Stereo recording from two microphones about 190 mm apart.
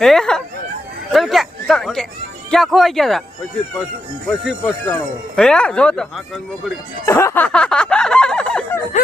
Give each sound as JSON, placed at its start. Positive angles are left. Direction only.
{"t": 0.0, "sound": "speech", "side_deg": 0}
{"t": 1.1, "sound": "a sound", "side_deg": 0}
{"t": 2.5, "sound": "speech", "side_deg": 0}
{"t": 4.4, "sound": "speech", "side_deg": 0}
{"t": 7.0, "sound": "chicken", "side_deg": 15}